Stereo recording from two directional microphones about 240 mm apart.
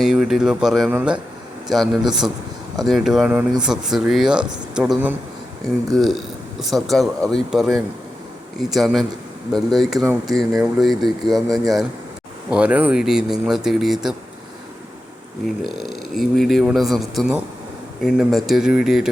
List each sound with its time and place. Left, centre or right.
0.0 s speech: centre
11.4 s speech: centre
12.5 s speech: centre
15.4 s speech: centre